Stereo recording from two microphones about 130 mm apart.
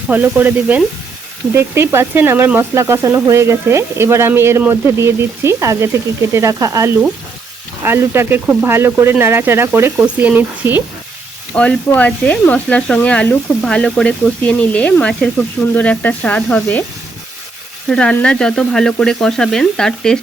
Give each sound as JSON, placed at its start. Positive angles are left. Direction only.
{"t": 0.1, "sound": "speech", "side_deg": -15}
{"t": 11.5, "sound": "speech", "side_deg": 10}
{"t": 17.8, "sound": "frying", "side_deg": 5}